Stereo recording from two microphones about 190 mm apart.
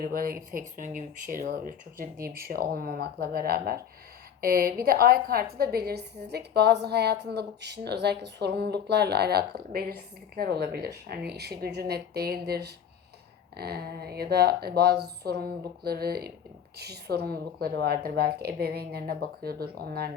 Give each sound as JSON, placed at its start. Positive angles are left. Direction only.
{"t": 0.0, "sound": "a woman's voice", "side_deg": -50}